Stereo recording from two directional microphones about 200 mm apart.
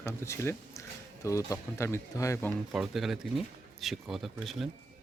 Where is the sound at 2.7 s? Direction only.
Centre (ahead or behind).